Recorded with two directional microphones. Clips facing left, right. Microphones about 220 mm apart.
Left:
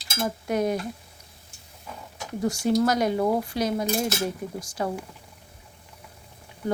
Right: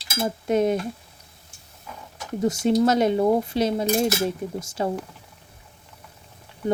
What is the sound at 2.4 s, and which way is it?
Speech, 20° right (ahead or behind).